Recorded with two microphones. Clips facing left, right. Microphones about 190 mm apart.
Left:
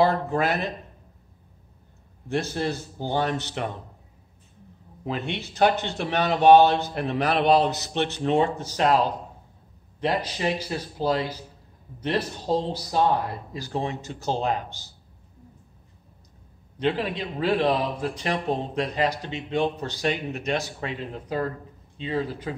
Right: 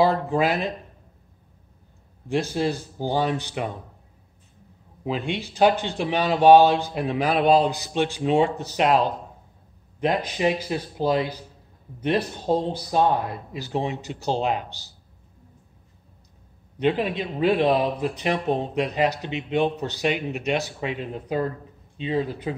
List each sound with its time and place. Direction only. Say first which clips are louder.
0.0 s speech: right 2 dB; 10° right (ahead or behind)
2.2 s speech: right 3 dB; 15° right (ahead or behind)
5.0 s speech: right 3 dB; 10° right (ahead or behind)
10.0 s speech: right 3 dB; 20° right (ahead or behind)
12.5 s speech: right 2 dB; 15° right (ahead or behind)
16.8 s speech: right 3 dB; 20° right (ahead or behind)